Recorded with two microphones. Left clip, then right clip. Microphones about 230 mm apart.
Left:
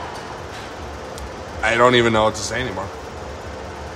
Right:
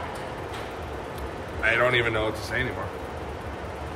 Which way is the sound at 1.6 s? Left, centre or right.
Centre.